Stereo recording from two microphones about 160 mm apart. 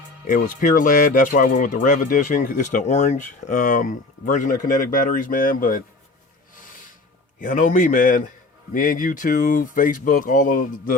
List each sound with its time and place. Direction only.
0.3 s speech: 60° left (ahead or behind)
7.3 s speech: 55° left (ahead or behind)